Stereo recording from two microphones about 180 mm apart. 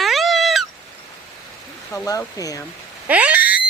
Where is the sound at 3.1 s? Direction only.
10° right (ahead or behind).